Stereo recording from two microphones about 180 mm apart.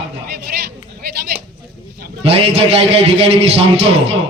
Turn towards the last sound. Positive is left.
turn(degrees=-35)  # may be behind; listen again after turning